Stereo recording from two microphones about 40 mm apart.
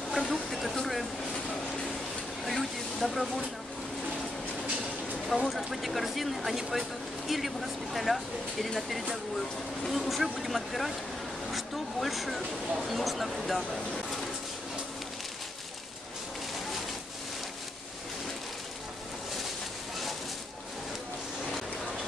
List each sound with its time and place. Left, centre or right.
0.1 s speech: centre
2.4 s speech: centre
5.5 s speech: centre